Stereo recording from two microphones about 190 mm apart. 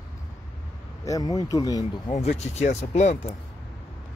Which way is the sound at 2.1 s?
40° left (ahead or behind).